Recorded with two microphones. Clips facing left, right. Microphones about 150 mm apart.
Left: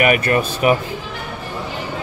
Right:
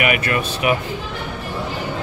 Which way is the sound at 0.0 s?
40° left (ahead or behind).